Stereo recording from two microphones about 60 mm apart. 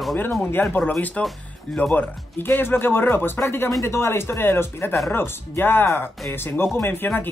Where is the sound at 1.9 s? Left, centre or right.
Left.